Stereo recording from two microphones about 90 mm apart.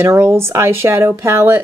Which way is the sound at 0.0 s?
30° right (ahead or behind).